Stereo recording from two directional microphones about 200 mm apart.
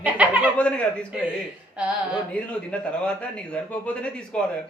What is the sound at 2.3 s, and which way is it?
A man's voice, 5° left (ahead or behind).